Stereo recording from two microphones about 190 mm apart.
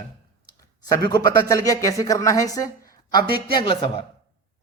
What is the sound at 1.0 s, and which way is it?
Speech, 20° left (ahead or behind).